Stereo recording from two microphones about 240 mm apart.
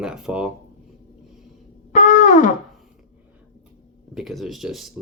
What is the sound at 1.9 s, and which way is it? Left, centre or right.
Music, left.